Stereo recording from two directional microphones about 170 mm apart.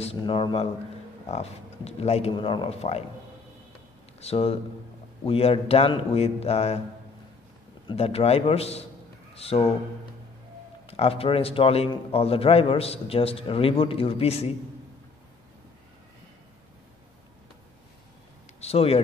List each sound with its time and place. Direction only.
0.0 s a man's voice: 35° left (ahead or behind)
4.2 s a man's voice: 35° left (ahead or behind)
7.9 s a man's voice: 35° left (ahead or behind)
10.9 s a man's voice: 35° left (ahead or behind)
18.6 s speech: 35° left (ahead or behind)